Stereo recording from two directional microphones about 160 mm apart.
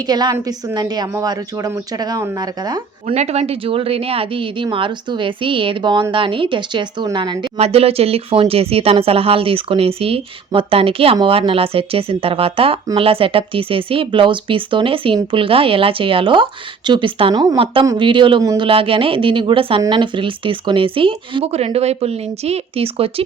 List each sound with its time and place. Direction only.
0.1 s a woman's voice: 25° right (ahead or behind)
3.2 s speech: 40° right (ahead or behind)
7.6 s speech: 40° right (ahead or behind)